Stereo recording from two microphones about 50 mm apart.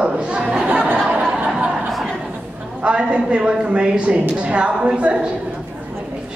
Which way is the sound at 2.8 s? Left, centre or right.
Right.